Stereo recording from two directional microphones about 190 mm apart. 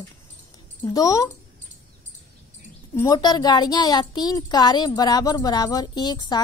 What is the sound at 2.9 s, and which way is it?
A woman's voice, 15° left (ahead or behind).